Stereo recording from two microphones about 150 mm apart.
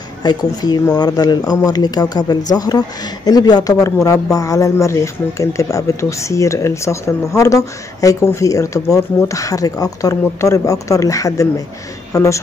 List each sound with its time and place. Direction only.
0.2 s speech: 25° left (ahead or behind)